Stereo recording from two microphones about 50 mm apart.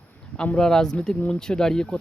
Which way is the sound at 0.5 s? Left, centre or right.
Centre.